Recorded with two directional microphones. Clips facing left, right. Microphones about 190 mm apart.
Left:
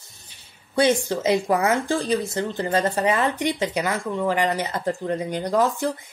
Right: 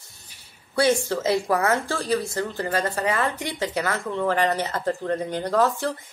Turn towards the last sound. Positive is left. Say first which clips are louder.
# left 1 dB
turn(degrees=15)  # may be behind; listen again after turning